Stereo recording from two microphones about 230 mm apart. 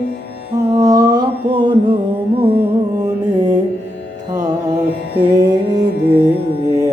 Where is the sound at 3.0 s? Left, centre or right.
Centre.